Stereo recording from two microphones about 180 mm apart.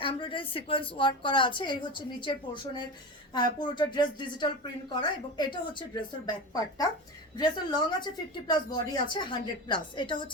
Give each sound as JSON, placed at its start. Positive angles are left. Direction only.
{"t": 0.0, "sound": "speech", "side_deg": 30}